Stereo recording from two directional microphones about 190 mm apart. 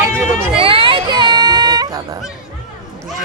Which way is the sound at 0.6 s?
30° right (ahead or behind).